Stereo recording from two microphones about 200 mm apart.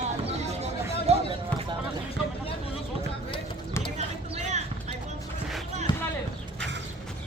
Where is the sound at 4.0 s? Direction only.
35° right (ahead or behind).